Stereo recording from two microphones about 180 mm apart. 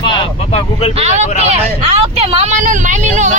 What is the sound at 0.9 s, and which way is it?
Speech, 40° right (ahead or behind).